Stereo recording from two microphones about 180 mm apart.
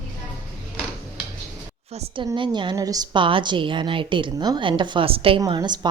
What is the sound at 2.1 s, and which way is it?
A woman's voice, 25° right (ahead or behind).